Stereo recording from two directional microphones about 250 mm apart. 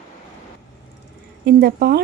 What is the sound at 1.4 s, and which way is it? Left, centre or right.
Speech, right.